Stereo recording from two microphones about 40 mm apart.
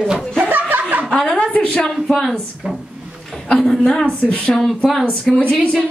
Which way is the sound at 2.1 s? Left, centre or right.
Centre.